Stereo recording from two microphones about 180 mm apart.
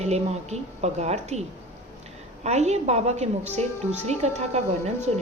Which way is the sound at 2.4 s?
40° right (ahead or behind).